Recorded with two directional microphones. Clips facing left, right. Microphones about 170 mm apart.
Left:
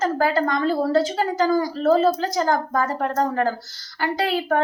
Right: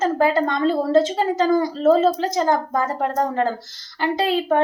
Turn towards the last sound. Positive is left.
turn(degrees=-20)  # may be behind; listen again after turning